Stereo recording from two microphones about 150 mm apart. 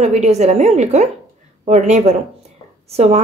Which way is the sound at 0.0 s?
50° right (ahead or behind).